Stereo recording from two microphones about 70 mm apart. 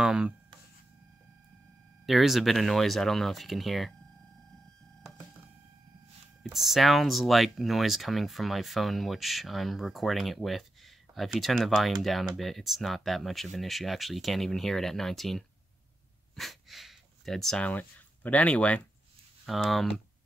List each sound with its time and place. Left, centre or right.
0.0 s a sound: centre
2.0 s speech: centre
6.4 s speech: centre
16.3 s a sound: centre
17.6 s speech: left
19.4 s speech: centre